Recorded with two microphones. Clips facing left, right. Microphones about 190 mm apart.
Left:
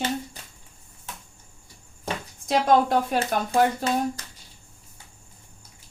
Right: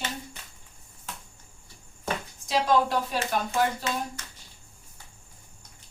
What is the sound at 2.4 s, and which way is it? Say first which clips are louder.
Speech: left 4 dB; 50° left (ahead or behind).